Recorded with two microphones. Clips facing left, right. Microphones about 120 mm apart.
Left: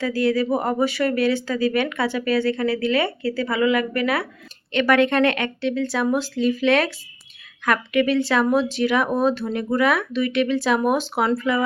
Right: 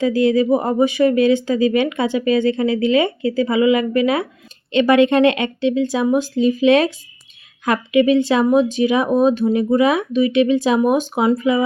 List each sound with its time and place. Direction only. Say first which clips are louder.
0.0 s speech: right 5 dB; 20° right (ahead or behind)